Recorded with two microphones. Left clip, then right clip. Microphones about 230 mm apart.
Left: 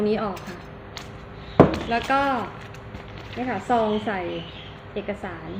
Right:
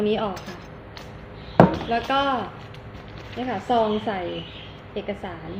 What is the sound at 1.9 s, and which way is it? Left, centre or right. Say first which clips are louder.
Speech: even; centre.